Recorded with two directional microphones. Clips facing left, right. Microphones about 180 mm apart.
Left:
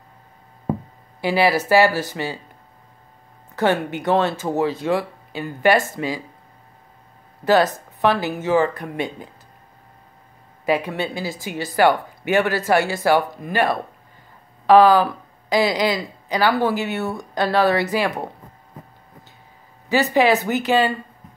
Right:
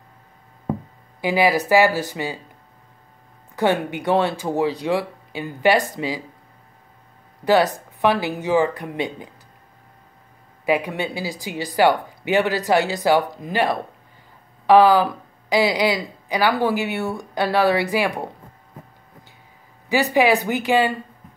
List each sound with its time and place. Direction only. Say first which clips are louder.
1.2 s speech: even; 15° right (ahead or behind)
3.5 s speech: even; 15° right (ahead or behind)
7.4 s speech: even; 15° right (ahead or behind)
10.6 s speech: even; 15° right (ahead or behind)
19.9 s speech: left 1 dB; 15° right (ahead or behind)